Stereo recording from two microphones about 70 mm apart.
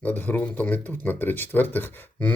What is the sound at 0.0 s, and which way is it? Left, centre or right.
Speech, left.